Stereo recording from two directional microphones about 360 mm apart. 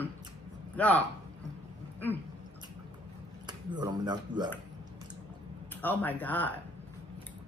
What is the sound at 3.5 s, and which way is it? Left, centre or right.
Speech, centre.